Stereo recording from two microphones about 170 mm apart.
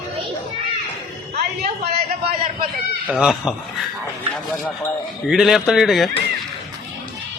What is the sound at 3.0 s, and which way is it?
Speech, 5° right (ahead or behind).